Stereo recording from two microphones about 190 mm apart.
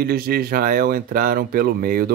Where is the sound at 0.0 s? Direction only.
55° right (ahead or behind).